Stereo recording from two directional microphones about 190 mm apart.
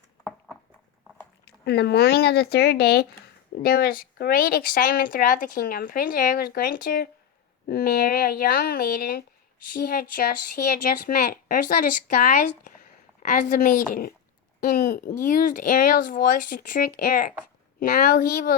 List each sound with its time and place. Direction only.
1.5 s speech: 60° left (ahead or behind)